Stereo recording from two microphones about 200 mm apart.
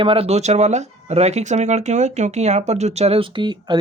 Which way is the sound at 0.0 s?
30° right (ahead or behind).